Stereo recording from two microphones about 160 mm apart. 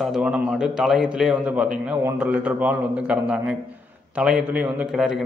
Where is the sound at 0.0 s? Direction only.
5° right (ahead or behind).